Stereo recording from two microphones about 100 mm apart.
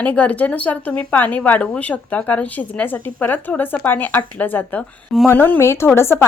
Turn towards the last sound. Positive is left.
turn(degrees=25)  # may be behind; listen again after turning